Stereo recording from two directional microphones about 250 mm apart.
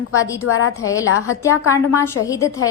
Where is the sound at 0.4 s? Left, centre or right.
Left.